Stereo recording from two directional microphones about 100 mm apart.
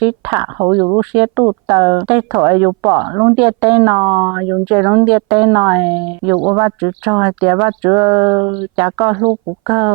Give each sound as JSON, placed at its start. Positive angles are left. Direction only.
{"t": 0.0, "sound": "a woman's voice", "side_deg": -15}
{"t": 0.6, "sound": "speech", "side_deg": -25}